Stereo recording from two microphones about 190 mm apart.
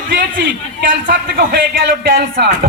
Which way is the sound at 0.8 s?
50° right (ahead or behind).